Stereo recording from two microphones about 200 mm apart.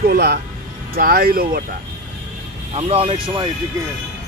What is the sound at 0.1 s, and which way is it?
Speech, 50° right (ahead or behind).